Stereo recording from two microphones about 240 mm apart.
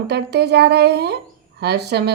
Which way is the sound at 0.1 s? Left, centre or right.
Right.